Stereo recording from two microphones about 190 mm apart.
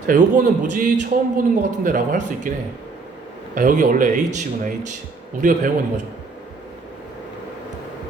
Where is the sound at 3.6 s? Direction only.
45° right (ahead or behind).